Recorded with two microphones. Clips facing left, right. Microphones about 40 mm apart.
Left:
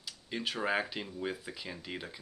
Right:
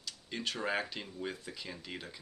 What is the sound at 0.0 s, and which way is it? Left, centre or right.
Speech, centre.